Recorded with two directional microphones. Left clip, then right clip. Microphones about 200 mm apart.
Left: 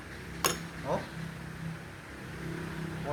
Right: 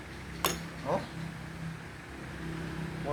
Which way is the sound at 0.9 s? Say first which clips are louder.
Right 1 dB; 20° right (ahead or behind).